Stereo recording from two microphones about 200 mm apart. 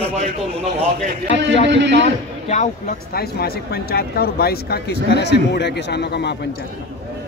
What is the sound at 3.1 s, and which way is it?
Speech, 50° left (ahead or behind).